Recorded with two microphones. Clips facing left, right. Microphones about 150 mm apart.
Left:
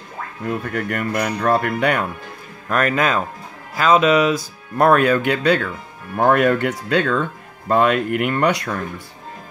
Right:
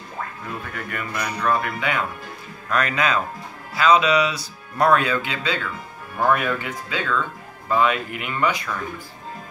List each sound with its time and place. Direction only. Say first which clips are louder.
0.5 s speech: left 8 dB; 60° left (ahead or behind)
2.7 s speech: left 3 dB; 50° left (ahead or behind); by 8.6 s 70° left (ahead or behind)